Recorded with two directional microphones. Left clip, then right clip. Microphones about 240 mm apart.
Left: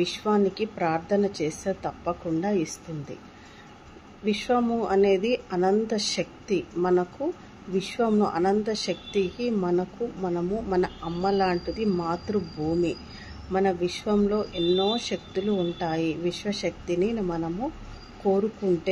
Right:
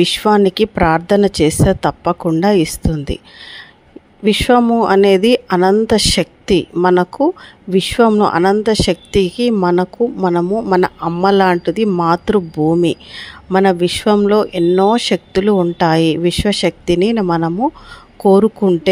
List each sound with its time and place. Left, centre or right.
0.0 s speech: right
4.2 s speech: right